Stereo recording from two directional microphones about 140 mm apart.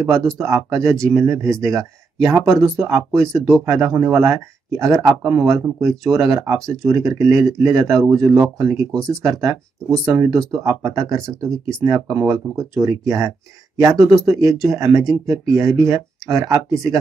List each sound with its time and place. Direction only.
0.0 s speech: 20° right (ahead or behind)
3.6 s speech: 20° right (ahead or behind)